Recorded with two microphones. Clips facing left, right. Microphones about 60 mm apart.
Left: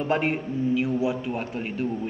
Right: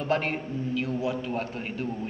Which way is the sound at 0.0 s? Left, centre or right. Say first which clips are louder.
Left 3 dB; centre.